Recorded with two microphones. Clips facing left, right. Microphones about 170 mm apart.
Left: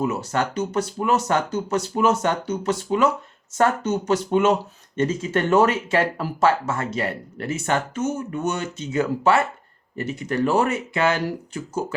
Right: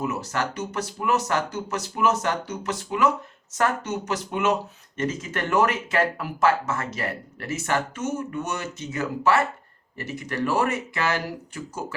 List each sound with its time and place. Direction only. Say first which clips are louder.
0.0 s speech: left 4 dB; 30° left (ahead or behind)